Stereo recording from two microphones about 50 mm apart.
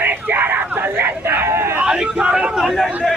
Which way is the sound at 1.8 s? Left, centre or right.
Centre.